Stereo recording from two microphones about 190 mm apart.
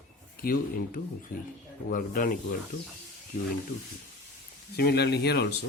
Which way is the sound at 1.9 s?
50° left (ahead or behind).